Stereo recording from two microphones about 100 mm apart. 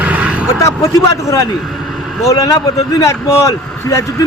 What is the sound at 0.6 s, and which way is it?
A man's voice, 30° left (ahead or behind).